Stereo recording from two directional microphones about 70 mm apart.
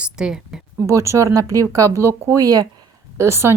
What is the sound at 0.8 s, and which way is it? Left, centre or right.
Speech, right.